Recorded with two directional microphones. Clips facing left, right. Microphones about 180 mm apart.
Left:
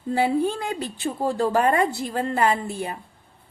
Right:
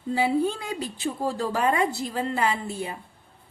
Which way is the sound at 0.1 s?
55° left (ahead or behind).